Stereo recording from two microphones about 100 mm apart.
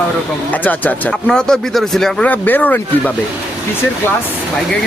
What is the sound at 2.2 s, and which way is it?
Speech, 20° left (ahead or behind).